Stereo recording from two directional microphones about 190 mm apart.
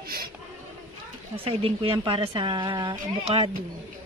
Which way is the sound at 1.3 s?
30° right (ahead or behind).